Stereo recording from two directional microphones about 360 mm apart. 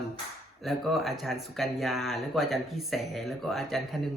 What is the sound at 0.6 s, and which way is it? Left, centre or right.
Speech, centre.